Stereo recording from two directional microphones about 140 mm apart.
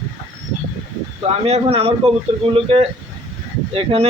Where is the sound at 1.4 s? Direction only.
45° right (ahead or behind).